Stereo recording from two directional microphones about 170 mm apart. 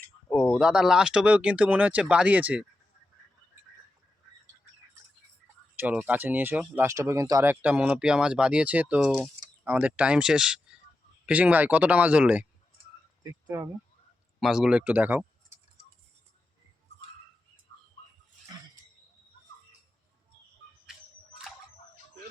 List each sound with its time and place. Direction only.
0.3 s speech: centre (ahead or behind)
5.7 s speech: 10° right (ahead or behind)
14.4 s speech: 5° right (ahead or behind)